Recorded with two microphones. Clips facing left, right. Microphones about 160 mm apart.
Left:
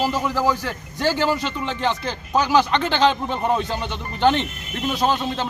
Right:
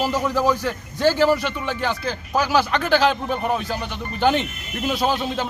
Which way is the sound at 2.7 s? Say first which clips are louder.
Right 2 dB; 25° left (ahead or behind).